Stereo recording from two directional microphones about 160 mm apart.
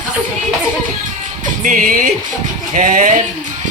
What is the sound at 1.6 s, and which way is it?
Music, 60° right (ahead or behind).